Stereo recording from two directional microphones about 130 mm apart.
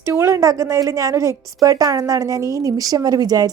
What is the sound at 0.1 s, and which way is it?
A woman's voice, 25° right (ahead or behind).